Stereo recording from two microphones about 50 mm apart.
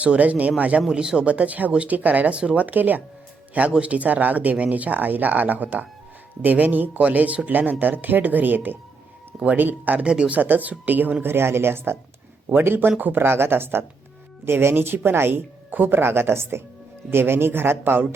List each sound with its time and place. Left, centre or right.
0.0 s speech: right
0.8 s speech: centre
1.3 s speech: right
2.3 s speech: centre
2.6 s speech: right
3.7 s speech: right
10.0 s speech: right
10.3 s speech: right
11.2 s speech: right